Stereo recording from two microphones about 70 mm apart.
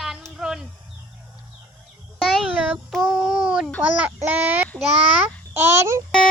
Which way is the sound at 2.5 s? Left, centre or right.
Centre.